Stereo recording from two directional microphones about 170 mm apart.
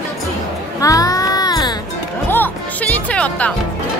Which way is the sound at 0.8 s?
20° left (ahead or behind).